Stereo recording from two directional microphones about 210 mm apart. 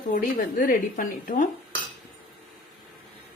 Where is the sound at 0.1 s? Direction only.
40° left (ahead or behind).